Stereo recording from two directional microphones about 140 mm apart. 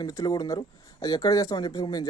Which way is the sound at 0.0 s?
25° left (ahead or behind).